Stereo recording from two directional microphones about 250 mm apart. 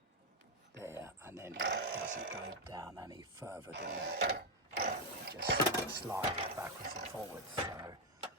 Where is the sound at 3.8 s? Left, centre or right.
Right.